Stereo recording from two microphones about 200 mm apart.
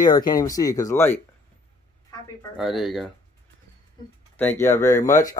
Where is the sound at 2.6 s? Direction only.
Centre (ahead or behind).